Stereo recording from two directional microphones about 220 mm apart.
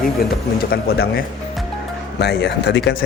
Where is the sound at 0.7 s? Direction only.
40° left (ahead or behind).